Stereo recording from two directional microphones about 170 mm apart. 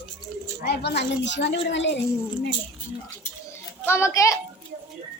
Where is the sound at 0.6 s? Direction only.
75° left (ahead or behind).